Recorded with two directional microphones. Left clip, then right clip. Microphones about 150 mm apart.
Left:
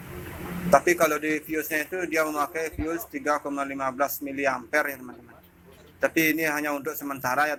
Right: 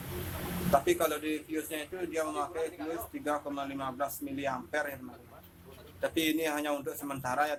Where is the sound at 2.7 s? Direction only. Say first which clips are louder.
Left 7 dB; centre (ahead or behind).